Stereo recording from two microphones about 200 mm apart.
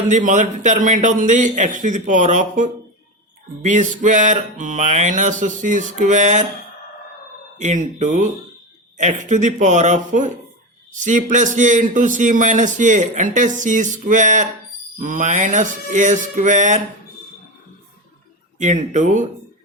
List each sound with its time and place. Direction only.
0.1 s a man's voice: 40° right (ahead or behind)
7.6 s a man's voice: 35° right (ahead or behind)
18.6 s a man's voice: 35° right (ahead or behind)